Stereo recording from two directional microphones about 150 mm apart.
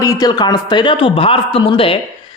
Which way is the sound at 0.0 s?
25° left (ahead or behind).